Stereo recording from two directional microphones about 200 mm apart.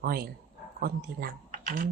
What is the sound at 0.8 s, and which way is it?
Speech, 50° right (ahead or behind).